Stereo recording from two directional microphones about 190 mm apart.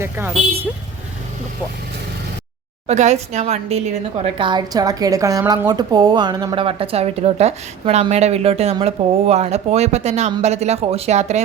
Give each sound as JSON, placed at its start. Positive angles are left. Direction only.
{"t": 0.0, "sound": "speech", "side_deg": -10}
{"t": 2.8, "sound": "a woman's voice", "side_deg": -35}